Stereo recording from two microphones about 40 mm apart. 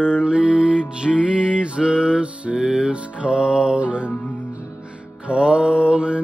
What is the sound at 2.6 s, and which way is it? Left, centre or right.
Music, centre.